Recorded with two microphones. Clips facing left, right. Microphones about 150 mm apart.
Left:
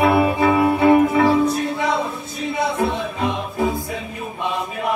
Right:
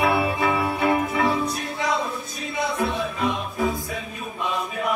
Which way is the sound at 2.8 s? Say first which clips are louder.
Left 3 dB; 25° left (ahead or behind).